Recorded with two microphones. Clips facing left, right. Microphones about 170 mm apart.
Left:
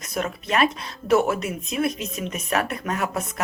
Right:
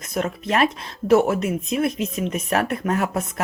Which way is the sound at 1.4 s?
55° right (ahead or behind).